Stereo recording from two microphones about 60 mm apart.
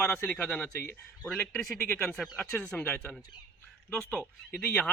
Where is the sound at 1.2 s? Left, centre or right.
Centre.